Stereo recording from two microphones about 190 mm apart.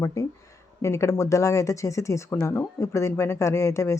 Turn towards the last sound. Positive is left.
turn(degrees=15)  # may be behind; listen again after turning